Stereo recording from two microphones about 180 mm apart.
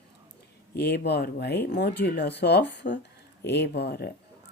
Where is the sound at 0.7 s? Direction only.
65° left (ahead or behind).